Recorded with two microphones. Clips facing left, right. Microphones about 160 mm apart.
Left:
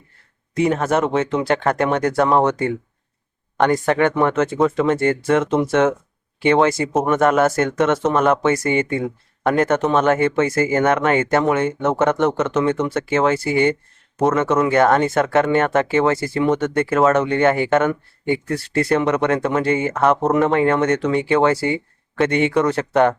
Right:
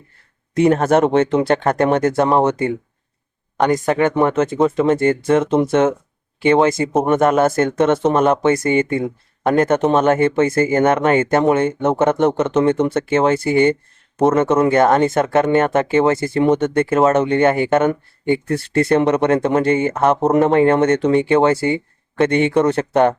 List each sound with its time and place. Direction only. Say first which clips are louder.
0.7 s speech: right 5 dB; 35° right (ahead or behind)
12.1 s speech: right 3 dB; 15° right (ahead or behind)